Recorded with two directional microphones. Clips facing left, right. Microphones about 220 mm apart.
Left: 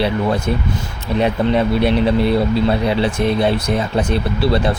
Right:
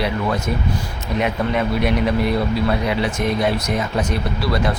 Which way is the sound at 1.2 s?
30° left (ahead or behind).